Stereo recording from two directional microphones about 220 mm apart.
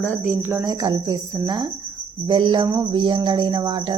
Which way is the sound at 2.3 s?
20° right (ahead or behind).